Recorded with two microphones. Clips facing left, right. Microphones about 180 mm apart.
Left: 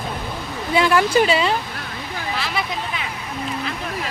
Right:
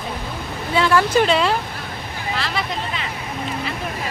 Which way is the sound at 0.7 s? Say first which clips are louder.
Even; 15° left (ahead or behind).